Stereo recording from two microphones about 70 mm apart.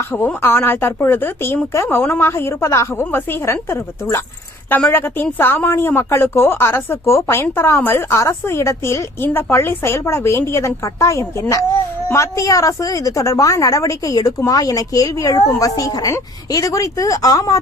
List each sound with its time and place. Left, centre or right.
0.4 s a woman's voice: left
8.2 s a woman's voice: left